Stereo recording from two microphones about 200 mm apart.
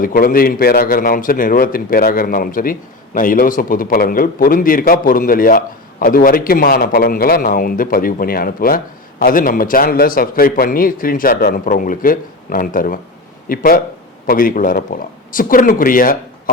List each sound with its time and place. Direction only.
0.0 s a man's voice: 45° left (ahead or behind)